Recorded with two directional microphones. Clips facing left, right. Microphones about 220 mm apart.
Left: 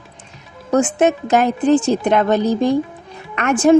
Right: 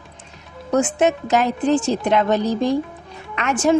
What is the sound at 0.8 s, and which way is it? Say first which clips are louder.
Speech: left 3 dB; 50° left (ahead or behind).